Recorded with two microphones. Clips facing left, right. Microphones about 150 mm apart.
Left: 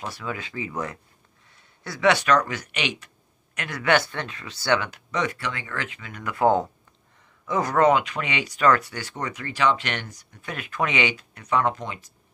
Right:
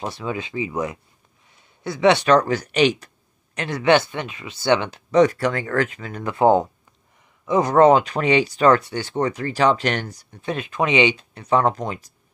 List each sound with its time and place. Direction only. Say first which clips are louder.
0.0 s speech: right 5 dB; 25° right (ahead or behind)
3.5 s speech: right 5 dB; 25° right (ahead or behind)